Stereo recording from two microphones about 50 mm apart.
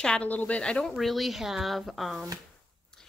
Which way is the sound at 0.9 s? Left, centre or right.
Centre.